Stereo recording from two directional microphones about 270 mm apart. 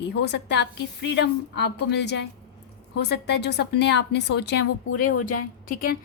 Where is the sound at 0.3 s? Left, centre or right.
Left.